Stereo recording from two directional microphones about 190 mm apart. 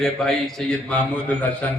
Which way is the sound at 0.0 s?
Centre (ahead or behind).